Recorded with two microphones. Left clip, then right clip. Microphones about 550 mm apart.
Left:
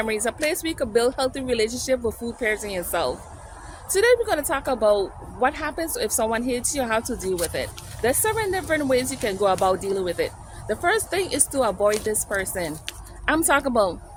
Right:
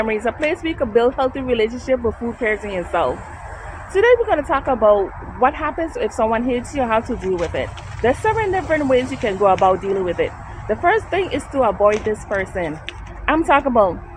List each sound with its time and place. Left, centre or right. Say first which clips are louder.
0.0 s speech: right 5 dB; left